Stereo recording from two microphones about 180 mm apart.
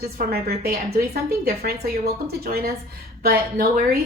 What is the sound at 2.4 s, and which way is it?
A woman's voice, 60° right (ahead or behind).